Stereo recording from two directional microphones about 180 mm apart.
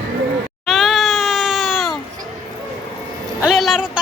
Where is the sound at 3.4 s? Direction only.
Centre (ahead or behind).